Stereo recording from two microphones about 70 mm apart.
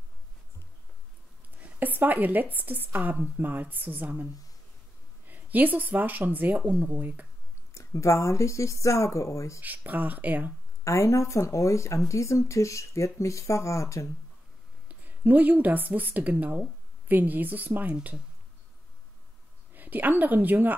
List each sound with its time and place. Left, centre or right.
1.6 s a woman's voice: right
7.7 s speech: left
9.6 s a woman's voice: right
10.8 s speech: left
14.9 s a woman's voice: right
19.7 s a woman's voice: right